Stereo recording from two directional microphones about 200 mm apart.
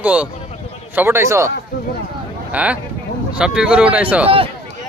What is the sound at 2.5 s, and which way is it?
Speech, 5° right (ahead or behind).